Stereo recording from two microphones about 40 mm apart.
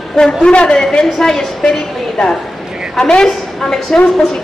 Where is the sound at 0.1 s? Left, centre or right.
Centre.